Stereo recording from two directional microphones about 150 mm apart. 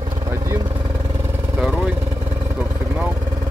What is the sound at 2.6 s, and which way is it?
Vehicle, 10° right (ahead or behind).